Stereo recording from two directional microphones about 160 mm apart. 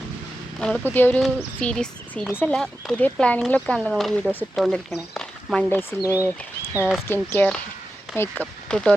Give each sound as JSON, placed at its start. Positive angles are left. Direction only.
{"t": 0.6, "sound": "speech", "side_deg": 5}
{"t": 4.5, "sound": "speech", "side_deg": 0}
{"t": 5.1, "sound": "a sound", "side_deg": 0}
{"t": 5.9, "sound": "speech", "side_deg": 10}
{"t": 6.7, "sound": "speech", "side_deg": -5}
{"t": 7.1, "sound": "speech", "side_deg": 15}